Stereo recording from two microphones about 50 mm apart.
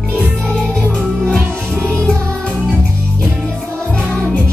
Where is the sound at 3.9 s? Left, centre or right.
Left.